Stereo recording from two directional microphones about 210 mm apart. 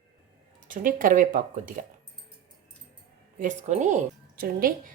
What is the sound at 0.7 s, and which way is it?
A woman's voice, 40° right (ahead or behind).